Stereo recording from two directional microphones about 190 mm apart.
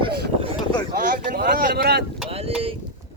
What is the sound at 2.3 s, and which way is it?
Boat, 30° right (ahead or behind).